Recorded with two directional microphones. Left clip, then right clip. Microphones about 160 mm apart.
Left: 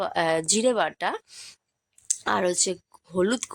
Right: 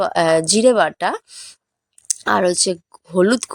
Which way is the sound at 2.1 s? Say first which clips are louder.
Right 8 dB; 35° right (ahead or behind).